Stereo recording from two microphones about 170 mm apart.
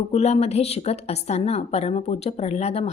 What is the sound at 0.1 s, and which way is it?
A woman's voice, 40° left (ahead or behind).